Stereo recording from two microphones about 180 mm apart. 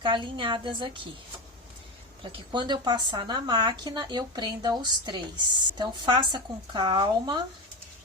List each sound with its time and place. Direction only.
0.0 s a woman's voice: 25° right (ahead or behind)
2.2 s a woman's voice: 25° right (ahead or behind)